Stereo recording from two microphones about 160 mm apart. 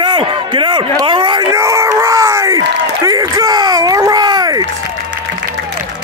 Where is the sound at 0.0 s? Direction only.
30° right (ahead or behind).